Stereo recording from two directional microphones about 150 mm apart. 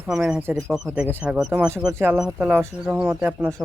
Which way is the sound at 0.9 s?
15° right (ahead or behind).